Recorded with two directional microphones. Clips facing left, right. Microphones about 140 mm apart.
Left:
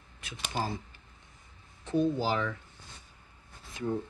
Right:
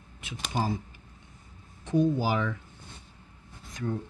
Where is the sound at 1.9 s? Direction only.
15° right (ahead or behind).